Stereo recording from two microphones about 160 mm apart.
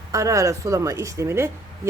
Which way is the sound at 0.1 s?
20° right (ahead or behind).